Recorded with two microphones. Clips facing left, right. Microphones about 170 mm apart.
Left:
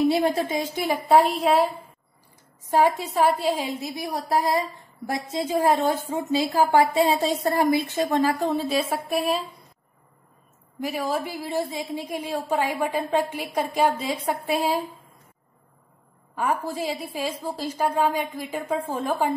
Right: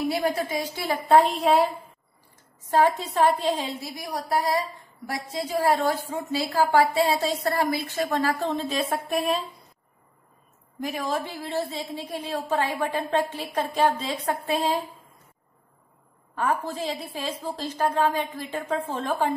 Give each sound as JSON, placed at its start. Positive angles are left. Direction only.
{"t": 0.1, "sound": "a woman's voice", "side_deg": 25}
{"t": 0.7, "sound": "a woman's voice", "side_deg": 15}
{"t": 2.7, "sound": "a woman's voice", "side_deg": 10}
{"t": 3.9, "sound": "a woman's voice", "side_deg": 25}
{"t": 10.8, "sound": "a woman's voice", "side_deg": 5}
{"t": 16.3, "sound": "a woman's voice", "side_deg": 10}